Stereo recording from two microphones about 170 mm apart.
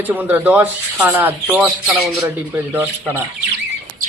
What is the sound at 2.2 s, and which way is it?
Speech, 15° right (ahead or behind).